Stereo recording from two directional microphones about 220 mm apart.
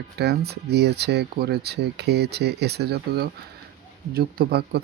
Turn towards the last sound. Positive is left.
turn(degrees=-45)  # may be behind; listen again after turning